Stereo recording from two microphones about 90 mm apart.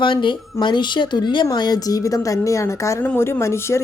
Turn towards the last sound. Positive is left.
turn(degrees=30)  # may be behind; listen again after turning